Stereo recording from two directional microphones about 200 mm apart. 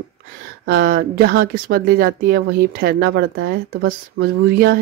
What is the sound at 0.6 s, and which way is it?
Speech, 50° right (ahead or behind).